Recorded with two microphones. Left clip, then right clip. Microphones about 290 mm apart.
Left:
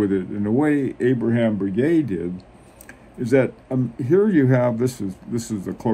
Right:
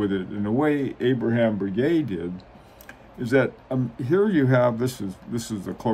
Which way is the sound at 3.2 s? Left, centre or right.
Right.